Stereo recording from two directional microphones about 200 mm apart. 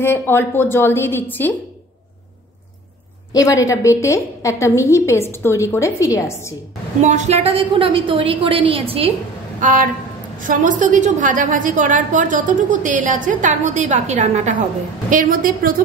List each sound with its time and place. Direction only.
0.0 s a woman's voice: 10° left (ahead or behind)
3.3 s a woman's voice: 15° left (ahead or behind)
7.0 s a woman's voice: 35° right (ahead or behind)
9.6 s a woman's voice: 40° right (ahead or behind)